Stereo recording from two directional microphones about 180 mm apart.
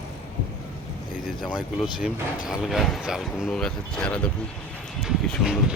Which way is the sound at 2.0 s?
5° right (ahead or behind).